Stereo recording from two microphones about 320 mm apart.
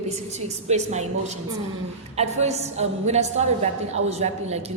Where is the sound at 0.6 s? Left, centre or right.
Right.